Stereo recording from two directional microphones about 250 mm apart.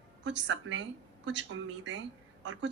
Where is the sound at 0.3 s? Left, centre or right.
Right.